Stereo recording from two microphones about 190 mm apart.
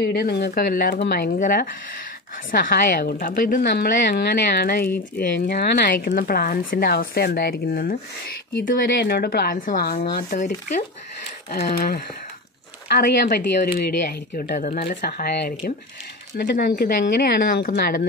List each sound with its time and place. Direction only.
0.0 s speech: 55° left (ahead or behind); by 10.8 s 40° left (ahead or behind)
12.8 s speech: 55° left (ahead or behind)